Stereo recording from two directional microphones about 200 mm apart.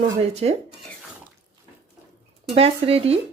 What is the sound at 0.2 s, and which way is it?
Speech, 30° right (ahead or behind).